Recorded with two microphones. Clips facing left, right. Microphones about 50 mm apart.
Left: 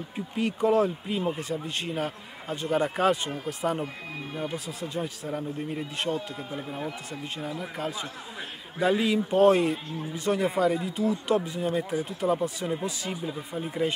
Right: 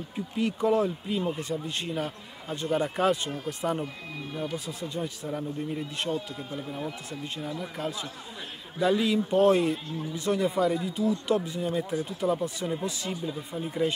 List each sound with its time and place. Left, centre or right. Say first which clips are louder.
0.4 s a man's voice: left 2 dB; centre
6.5 s a man's voice: even; centre
13.1 s speech: even; centre